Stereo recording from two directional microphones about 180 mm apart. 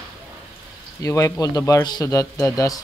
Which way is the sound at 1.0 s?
15° left (ahead or behind).